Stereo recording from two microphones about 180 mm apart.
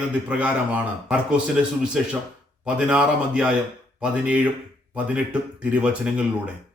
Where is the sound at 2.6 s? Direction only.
5° right (ahead or behind).